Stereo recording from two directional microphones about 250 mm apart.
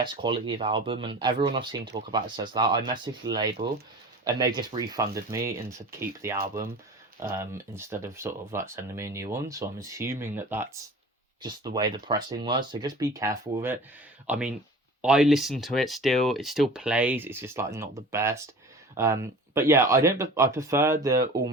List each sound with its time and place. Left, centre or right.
0.0 s speech: centre